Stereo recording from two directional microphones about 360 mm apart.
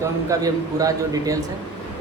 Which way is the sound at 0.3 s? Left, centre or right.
Centre.